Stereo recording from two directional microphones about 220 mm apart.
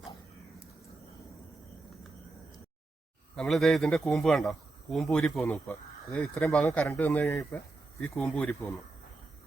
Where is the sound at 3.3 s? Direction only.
Centre (ahead or behind).